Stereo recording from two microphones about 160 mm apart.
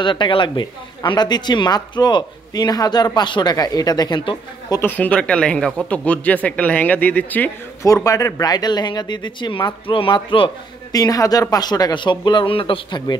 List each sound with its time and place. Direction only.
0.0 s speech: 30° left (ahead or behind)
4.7 s speech: 10° left (ahead or behind); by 13.2 s 25° left (ahead or behind)